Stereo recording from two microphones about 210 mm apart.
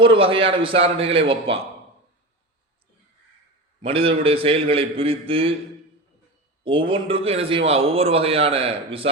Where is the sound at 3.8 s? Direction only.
25° right (ahead or behind).